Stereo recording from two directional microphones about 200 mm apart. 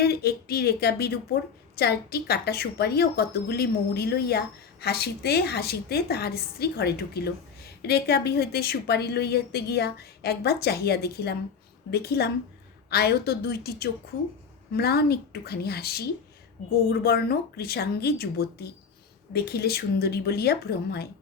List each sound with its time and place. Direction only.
0.0 s a woman's voice: 50° left (ahead or behind)